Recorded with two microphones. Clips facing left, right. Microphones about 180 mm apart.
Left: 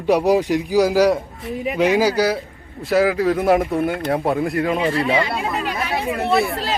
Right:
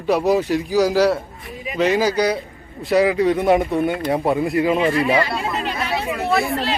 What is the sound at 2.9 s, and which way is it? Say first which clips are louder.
A woman's voice: right 1 dB; centre (ahead or behind).